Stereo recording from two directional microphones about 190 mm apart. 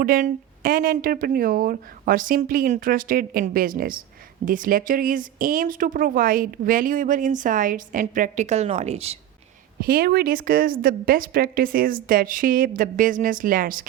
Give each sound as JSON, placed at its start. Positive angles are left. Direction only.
{"t": 0.0, "sound": "speech", "side_deg": -45}
{"t": 9.8, "sound": "speech", "side_deg": -50}